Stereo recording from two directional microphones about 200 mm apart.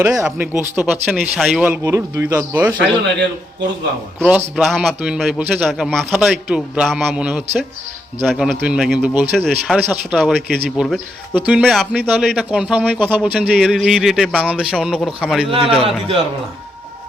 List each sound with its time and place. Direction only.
0.0 s speech: 15° right (ahead or behind)
4.2 s a man's voice: 5° right (ahead or behind)
15.4 s a man's voice: 25° right (ahead or behind)